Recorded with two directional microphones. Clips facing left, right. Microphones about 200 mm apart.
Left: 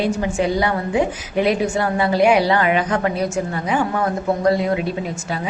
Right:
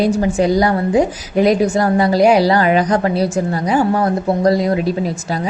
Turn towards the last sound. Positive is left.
turn(degrees=-40)  # may be behind; listen again after turning